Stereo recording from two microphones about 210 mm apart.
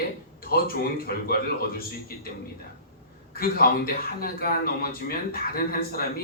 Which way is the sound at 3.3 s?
45° left (ahead or behind).